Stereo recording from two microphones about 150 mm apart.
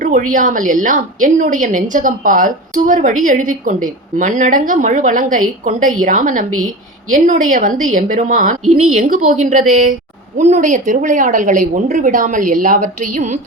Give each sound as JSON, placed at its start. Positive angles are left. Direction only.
{"t": 0.0, "sound": "a woman's voice", "side_deg": -60}